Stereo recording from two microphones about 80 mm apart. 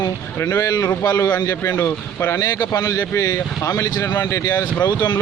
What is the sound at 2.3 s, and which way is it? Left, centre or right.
Speech, left.